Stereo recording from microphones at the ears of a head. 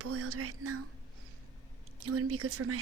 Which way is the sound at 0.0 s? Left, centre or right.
Right.